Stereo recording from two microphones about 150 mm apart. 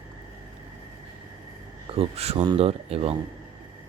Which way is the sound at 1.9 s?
40° right (ahead or behind).